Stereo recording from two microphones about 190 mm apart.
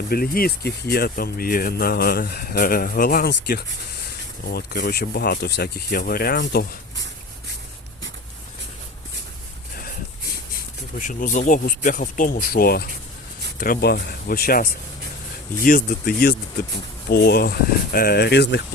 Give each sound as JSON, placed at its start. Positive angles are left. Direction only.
{"t": 0.1, "sound": "speech", "side_deg": 55}
{"t": 10.9, "sound": "speech", "side_deg": 45}